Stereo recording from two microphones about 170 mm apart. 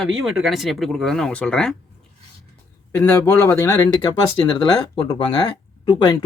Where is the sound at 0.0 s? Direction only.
Centre (ahead or behind).